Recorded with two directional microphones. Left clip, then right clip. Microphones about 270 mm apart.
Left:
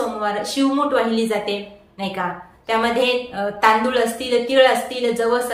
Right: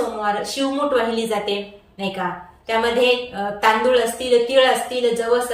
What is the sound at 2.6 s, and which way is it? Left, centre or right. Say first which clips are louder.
A woman's voice: right 1 dB; centre.